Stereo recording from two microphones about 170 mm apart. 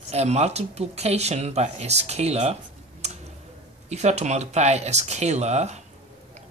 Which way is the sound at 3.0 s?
40° right (ahead or behind).